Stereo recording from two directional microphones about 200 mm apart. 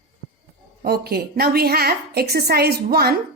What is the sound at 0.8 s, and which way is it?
A woman's voice, 50° right (ahead or behind).